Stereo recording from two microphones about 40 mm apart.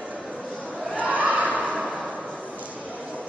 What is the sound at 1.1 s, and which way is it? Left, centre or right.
Crowd, right.